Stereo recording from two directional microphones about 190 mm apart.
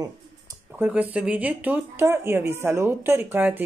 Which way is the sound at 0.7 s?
5° right (ahead or behind).